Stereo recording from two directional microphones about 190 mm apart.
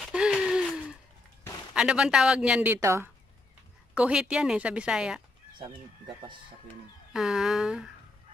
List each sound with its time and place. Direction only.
0.1 s gasp: 5° right (ahead or behind)
1.7 s speech: 5° right (ahead or behind)
5.6 s speech: 25° right (ahead or behind)
7.1 s speech: centre (ahead or behind)